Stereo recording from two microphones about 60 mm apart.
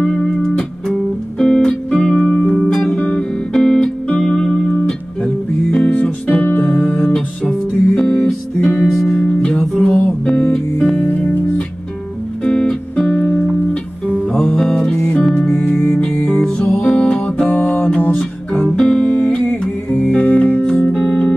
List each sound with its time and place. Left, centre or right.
0.0 s music: centre
3.0 s music: left
3.5 s music: centre
4.7 s music: left
15.5 s music: left
16.3 s music: centre
18.8 s music: centre
19.0 s music: centre